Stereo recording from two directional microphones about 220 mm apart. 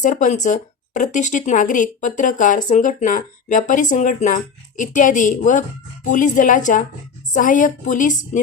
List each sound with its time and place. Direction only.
0.0 s speech: 35° left (ahead or behind)